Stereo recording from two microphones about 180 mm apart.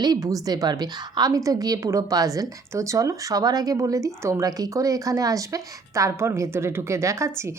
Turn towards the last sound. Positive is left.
turn(degrees=-15)  # may be behind; listen again after turning